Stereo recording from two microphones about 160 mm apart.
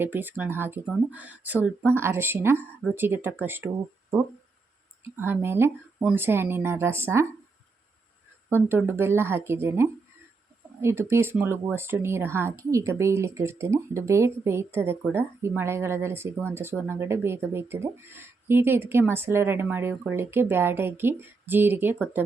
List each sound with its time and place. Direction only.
0.0 s speech: 10° right (ahead or behind)
5.1 s speech: 15° right (ahead or behind)
8.4 s speech: 15° right (ahead or behind)